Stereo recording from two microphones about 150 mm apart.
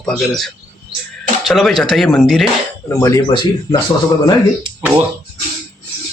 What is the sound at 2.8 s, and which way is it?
Speech, 20° left (ahead or behind).